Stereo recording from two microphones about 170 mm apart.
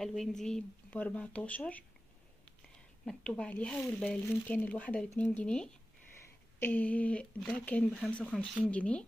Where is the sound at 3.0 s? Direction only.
5° left (ahead or behind).